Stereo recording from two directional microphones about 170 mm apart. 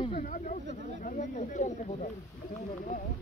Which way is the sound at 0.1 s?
55° left (ahead or behind).